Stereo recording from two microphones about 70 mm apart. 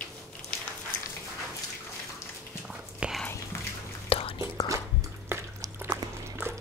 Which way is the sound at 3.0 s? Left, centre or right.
Centre.